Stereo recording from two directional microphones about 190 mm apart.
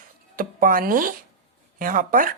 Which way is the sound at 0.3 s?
50° right (ahead or behind).